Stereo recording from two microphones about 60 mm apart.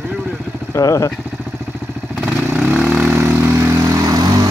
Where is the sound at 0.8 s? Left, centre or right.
Left.